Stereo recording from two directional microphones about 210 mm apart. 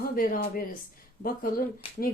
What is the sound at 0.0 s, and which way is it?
Speech, 45° left (ahead or behind).